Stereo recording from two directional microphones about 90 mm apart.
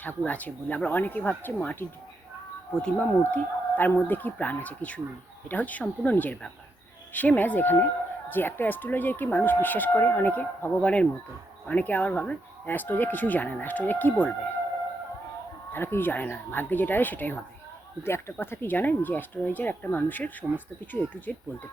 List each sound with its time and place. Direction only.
0.3 s speech: 20° left (ahead or behind)
15.7 s speech: 25° left (ahead or behind)